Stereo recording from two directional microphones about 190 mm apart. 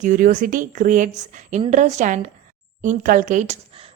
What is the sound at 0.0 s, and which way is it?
A woman's voice, 45° right (ahead or behind).